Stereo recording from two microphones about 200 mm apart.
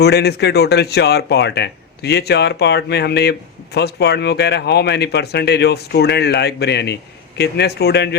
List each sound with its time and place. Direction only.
0.0 s speech: 55° left (ahead or behind)